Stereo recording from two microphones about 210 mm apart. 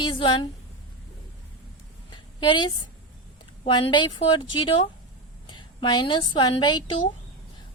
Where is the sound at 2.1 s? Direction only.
20° left (ahead or behind).